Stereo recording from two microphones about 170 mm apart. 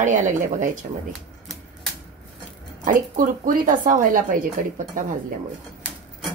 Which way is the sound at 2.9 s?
55° right (ahead or behind).